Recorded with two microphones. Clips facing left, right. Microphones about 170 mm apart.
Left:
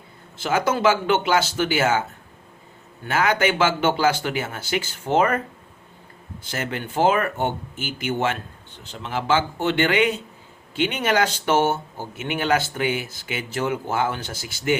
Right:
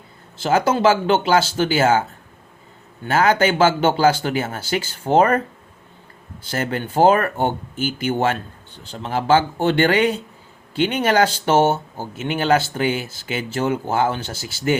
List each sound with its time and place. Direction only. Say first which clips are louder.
0.4 s speech: right 4 dB; 30° right (ahead or behind)
6.5 s speech: right 5 dB; 35° right (ahead or behind)